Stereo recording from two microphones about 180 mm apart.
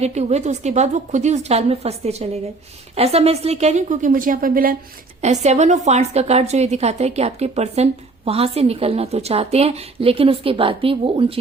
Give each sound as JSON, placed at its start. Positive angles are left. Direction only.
{"t": 0.0, "sound": "a woman's voice", "side_deg": -40}
{"t": 5.2, "sound": "a woman's voice", "side_deg": -40}